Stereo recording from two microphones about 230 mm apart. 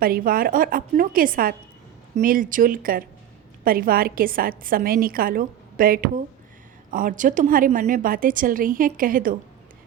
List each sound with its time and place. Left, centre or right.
0.0 s a woman's voice: right